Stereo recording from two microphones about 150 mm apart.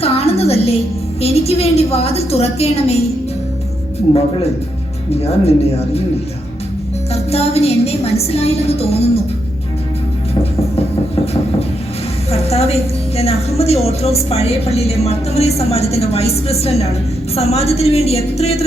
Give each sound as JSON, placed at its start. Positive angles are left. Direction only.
{"t": 0.0, "sound": "music", "side_deg": 40}
{"t": 1.2, "sound": "a woman's voice", "side_deg": 40}
{"t": 5.2, "sound": "a woman's voice", "side_deg": 45}
{"t": 7.1, "sound": "a woman's voice", "side_deg": 45}
{"t": 12.3, "sound": "a woman's voice", "side_deg": 45}